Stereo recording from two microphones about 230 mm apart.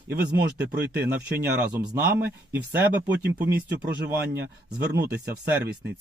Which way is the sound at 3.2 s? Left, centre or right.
Right.